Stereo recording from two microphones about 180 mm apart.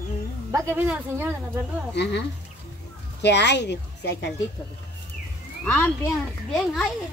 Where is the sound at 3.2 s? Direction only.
70° left (ahead or behind).